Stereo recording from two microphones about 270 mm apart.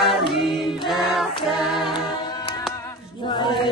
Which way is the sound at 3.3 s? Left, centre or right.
Centre.